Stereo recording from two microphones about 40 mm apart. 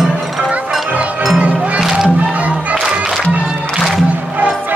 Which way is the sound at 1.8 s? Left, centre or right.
Centre.